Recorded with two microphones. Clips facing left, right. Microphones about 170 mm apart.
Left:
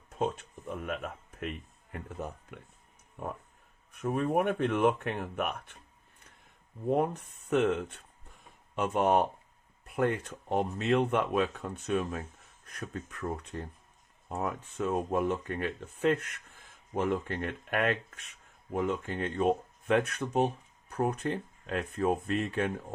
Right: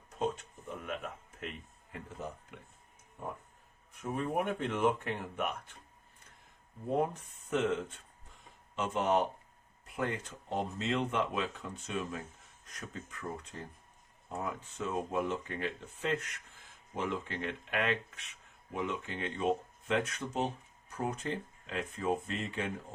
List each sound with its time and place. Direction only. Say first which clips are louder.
0.2 s a sound: left 3 dB; 55° left (ahead or behind)
3.9 s speech: left 5 dB; 60° left (ahead or behind)
7.5 s speech: left 4 dB; 65° left (ahead or behind)